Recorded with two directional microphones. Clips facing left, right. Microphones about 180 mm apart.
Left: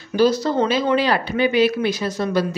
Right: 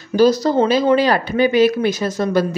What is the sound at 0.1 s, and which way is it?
A woman's voice, 40° right (ahead or behind).